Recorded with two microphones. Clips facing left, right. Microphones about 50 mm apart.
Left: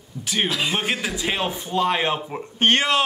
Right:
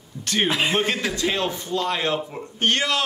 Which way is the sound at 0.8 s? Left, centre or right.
Centre.